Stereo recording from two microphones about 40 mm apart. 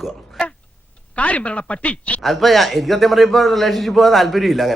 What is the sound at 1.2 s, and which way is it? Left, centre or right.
Speech, left.